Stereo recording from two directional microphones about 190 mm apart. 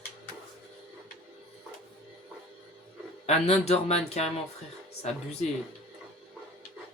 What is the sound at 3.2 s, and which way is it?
Speech, 35° left (ahead or behind).